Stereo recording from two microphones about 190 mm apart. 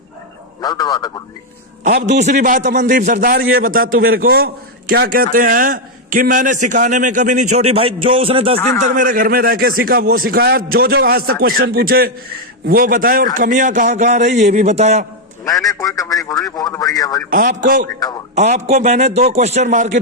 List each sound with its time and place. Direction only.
0.6 s a man's voice: 20° left (ahead or behind)
2.0 s a man's voice: 40° right (ahead or behind)
8.9 s a man's voice: 45° right (ahead or behind)
15.4 s a man's voice: 20° left (ahead or behind)
17.2 s a man's voice: 50° right (ahead or behind)